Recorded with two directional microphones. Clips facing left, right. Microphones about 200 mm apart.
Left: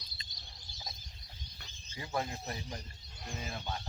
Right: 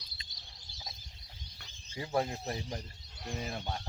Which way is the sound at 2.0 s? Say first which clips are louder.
Right 4 dB; 35° right (ahead or behind).